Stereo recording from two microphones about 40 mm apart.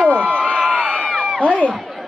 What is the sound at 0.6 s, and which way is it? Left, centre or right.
Crowd, centre.